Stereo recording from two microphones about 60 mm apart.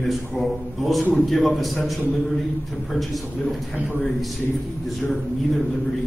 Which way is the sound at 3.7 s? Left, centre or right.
Right.